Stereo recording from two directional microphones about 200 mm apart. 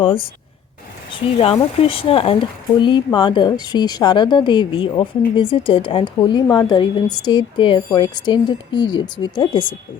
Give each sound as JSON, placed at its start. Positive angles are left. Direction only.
{"t": 0.0, "sound": "speech", "side_deg": 25}